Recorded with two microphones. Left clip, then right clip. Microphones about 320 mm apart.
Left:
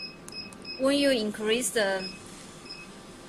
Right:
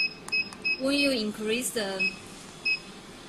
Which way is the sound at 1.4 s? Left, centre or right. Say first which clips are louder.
Left 5 dB; left.